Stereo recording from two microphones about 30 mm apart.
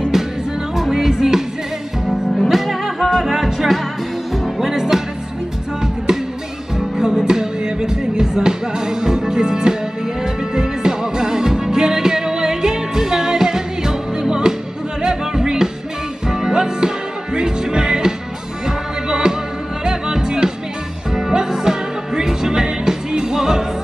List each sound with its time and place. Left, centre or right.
0.1 s music: centre
2.0 s music: centre
6.1 s music: right
7.2 s music: right